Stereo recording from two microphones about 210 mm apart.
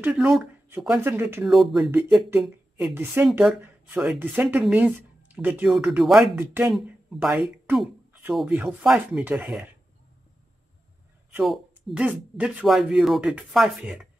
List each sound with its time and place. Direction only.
0.0 s speech: 5° right (ahead or behind)
11.3 s speech: 5° right (ahead or behind)